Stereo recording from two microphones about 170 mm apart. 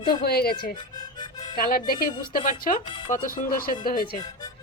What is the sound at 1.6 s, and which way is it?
Speech, 60° left (ahead or behind).